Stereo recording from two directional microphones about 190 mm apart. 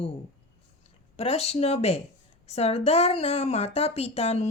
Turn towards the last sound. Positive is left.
turn(degrees=35)  # may be behind; listen again after turning